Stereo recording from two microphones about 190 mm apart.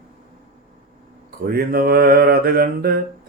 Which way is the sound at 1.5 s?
50° right (ahead or behind).